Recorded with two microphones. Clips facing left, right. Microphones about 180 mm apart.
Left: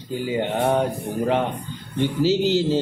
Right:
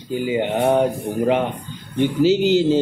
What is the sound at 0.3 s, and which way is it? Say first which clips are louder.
Speech: right 3 dB; 15° right (ahead or behind).